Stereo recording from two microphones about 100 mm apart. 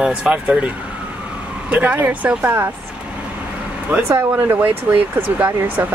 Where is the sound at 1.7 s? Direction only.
15° right (ahead or behind).